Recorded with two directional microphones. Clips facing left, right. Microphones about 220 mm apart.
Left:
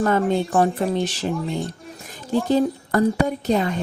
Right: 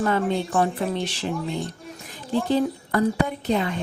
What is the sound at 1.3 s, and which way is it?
Speech, centre (ahead or behind).